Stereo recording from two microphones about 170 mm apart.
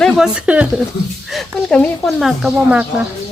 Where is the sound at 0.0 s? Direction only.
5° right (ahead or behind).